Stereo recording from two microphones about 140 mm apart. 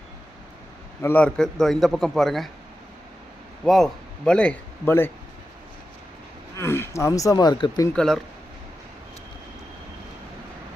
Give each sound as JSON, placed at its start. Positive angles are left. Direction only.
{"t": 1.0, "sound": "a man's voice", "side_deg": 10}
{"t": 3.6, "sound": "a man's voice", "side_deg": 0}
{"t": 6.6, "sound": "speech", "side_deg": 20}
{"t": 7.9, "sound": "a man's voice", "side_deg": 5}